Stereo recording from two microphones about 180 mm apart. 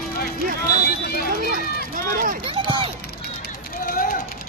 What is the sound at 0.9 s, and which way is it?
Run, 55° left (ahead or behind).